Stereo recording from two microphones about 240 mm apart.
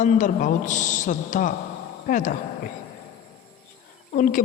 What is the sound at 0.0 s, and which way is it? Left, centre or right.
A woman's voice, left.